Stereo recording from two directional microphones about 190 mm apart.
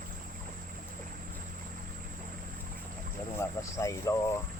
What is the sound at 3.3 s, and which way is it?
Speech, 15° left (ahead or behind).